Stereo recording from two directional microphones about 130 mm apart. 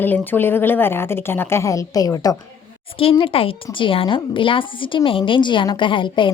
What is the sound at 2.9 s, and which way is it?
Speech, 45° left (ahead or behind).